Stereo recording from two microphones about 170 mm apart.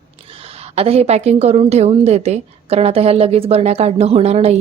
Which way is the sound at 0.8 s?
35° right (ahead or behind).